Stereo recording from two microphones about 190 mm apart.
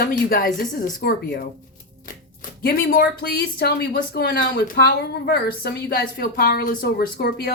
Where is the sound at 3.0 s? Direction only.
55° left (ahead or behind).